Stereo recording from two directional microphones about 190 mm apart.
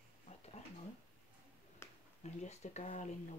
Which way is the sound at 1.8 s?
10° left (ahead or behind).